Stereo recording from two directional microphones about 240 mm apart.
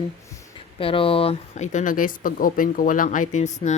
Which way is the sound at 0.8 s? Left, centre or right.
Left.